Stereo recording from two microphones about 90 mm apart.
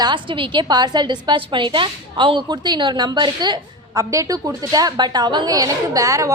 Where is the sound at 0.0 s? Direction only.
65° right (ahead or behind).